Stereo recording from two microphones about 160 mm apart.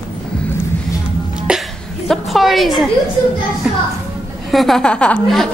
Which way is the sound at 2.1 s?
Centre (ahead or behind).